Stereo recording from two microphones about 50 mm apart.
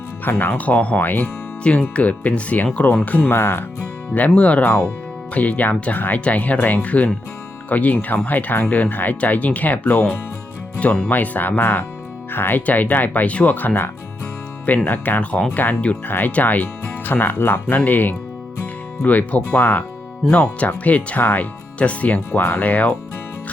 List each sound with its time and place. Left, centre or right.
0.3 s speech: left
0.5 s speech: left
3.2 s speech: left
4.1 s speech: left
17.7 s speech: left
22.3 s speech: left